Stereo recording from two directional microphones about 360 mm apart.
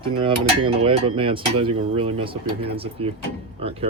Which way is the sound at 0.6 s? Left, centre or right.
Centre.